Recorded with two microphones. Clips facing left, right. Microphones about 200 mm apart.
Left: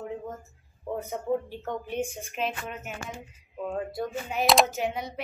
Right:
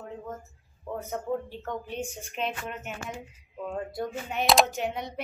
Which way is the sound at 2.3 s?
Centre (ahead or behind).